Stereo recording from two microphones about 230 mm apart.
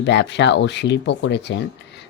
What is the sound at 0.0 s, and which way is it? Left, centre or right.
Speech, left.